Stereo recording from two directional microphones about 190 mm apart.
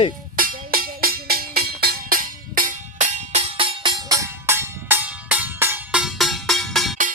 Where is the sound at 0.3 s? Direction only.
45° right (ahead or behind); by 6.9 s centre (ahead or behind).